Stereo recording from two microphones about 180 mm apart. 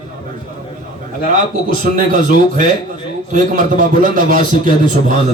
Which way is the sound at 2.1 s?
45° right (ahead or behind).